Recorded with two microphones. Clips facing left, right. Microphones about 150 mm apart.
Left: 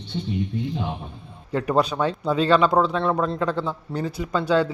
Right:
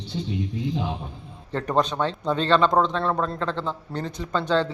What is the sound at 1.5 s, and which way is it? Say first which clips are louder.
Speech: left 2 dB; 10° left (ahead or behind).